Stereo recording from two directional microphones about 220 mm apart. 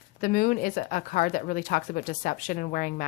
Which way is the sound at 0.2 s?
40° left (ahead or behind).